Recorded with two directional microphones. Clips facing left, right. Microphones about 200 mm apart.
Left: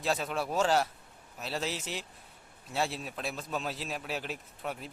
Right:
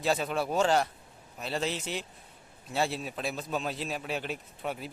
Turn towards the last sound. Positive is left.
turn(degrees=0)  # may be behind; listen again after turning